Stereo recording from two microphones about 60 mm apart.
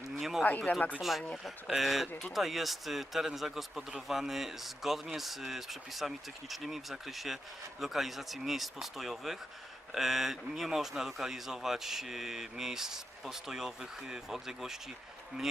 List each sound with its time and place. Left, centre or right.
0.2 s speech: centre
0.7 s speech: left
1.5 s speech: centre